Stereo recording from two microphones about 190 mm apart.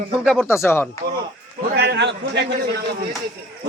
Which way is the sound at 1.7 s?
60° right (ahead or behind).